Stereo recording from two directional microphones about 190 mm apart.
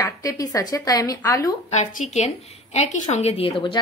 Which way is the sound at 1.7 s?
40° left (ahead or behind).